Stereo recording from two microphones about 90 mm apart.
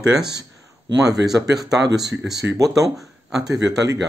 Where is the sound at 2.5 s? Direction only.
40° right (ahead or behind).